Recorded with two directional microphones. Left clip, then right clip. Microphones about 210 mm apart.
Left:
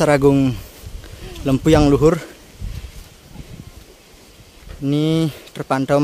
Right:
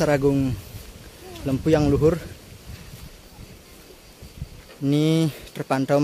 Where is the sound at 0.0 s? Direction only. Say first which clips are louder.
Left 6 dB; 30° left (ahead or behind).